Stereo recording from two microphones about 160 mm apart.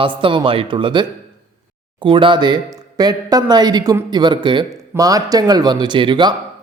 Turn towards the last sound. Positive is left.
turn(degrees=-30)  # may be behind; listen again after turning